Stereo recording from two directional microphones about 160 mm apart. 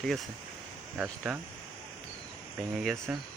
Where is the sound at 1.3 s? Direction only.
Centre (ahead or behind).